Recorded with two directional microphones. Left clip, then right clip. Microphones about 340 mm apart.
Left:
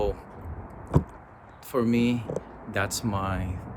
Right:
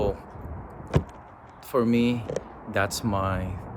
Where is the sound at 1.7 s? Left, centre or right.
Centre.